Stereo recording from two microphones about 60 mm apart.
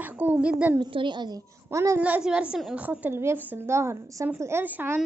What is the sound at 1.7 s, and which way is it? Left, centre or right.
Speech, right.